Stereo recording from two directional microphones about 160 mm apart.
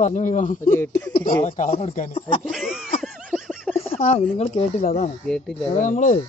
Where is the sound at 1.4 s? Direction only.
45° left (ahead or behind).